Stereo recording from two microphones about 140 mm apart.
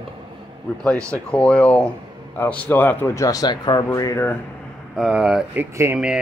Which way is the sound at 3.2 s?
30° left (ahead or behind).